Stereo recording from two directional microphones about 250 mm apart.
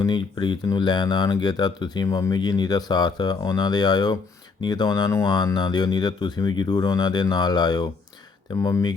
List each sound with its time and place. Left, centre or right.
0.0 s speech: centre